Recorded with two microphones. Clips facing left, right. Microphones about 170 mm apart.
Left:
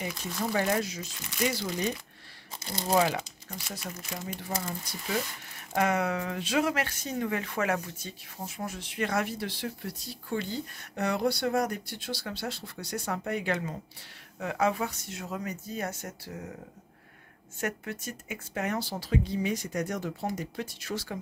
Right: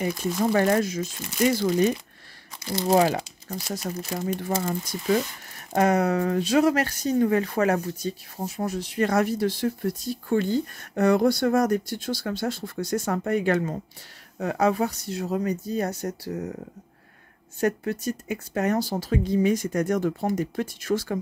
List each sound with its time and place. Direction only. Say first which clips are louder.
0.0 s speech: right 9 dB; 50° right (ahead or behind)
2.9 s speech: right 5 dB; 40° right (ahead or behind)
5.7 s speech: right 6 dB; 40° right (ahead or behind)
14.4 s speech: right 6 dB; 40° right (ahead or behind)
17.6 s speech: right 9 dB; 35° right (ahead or behind)